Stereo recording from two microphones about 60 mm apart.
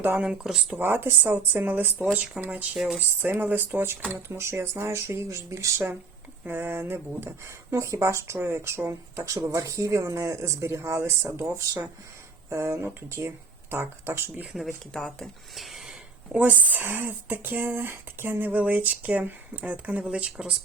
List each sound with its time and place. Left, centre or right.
0.4 s speech: centre
0.8 s speech: right
2.7 s speech: centre
3.2 s speech: right
6.5 s speech: right
12.5 s speech: right
14.9 s speech: centre
15.5 s a sound: centre
16.3 s speech: right